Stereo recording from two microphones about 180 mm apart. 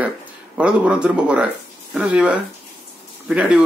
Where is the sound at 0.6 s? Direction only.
5° right (ahead or behind).